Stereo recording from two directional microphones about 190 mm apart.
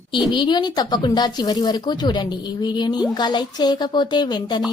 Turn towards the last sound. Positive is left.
turn(degrees=25)  # may be behind; listen again after turning